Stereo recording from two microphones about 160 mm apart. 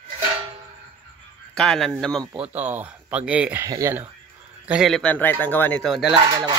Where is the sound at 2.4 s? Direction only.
10° right (ahead or behind).